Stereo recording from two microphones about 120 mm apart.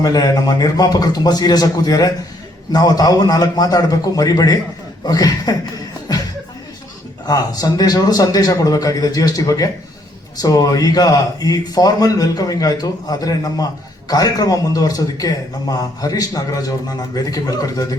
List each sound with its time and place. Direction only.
0.0 s a man's voice: 35° left (ahead or behind)
7.3 s a man's voice: 30° left (ahead or behind)